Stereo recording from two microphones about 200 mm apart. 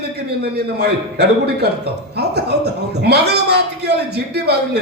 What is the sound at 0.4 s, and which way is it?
Speech, 55° right (ahead or behind).